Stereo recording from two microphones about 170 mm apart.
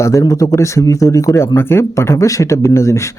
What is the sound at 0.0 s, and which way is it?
Speech, 20° left (ahead or behind).